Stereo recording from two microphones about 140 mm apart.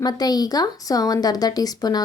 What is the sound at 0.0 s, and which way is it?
Speech, 30° left (ahead or behind).